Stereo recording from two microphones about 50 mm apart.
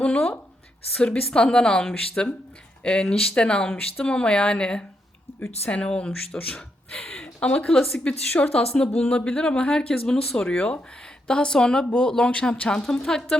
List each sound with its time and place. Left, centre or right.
0.0 s speech: centre